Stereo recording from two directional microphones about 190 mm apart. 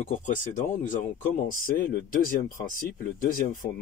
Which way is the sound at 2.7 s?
45° left (ahead or behind).